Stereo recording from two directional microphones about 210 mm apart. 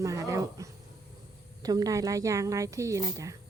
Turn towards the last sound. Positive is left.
turn(degrees=-15)  # may be behind; listen again after turning